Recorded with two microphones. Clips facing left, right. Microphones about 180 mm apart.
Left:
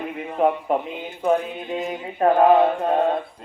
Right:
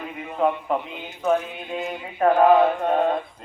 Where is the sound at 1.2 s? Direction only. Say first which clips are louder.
Left 1 dB; 30° left (ahead or behind).